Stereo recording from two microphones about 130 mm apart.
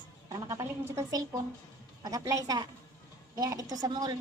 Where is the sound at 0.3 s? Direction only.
25° right (ahead or behind).